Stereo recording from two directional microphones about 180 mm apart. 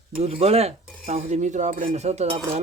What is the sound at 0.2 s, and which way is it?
Speech, 35° right (ahead or behind).